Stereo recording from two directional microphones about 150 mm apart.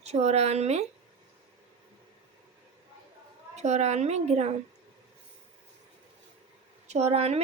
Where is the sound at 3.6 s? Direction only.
50° right (ahead or behind).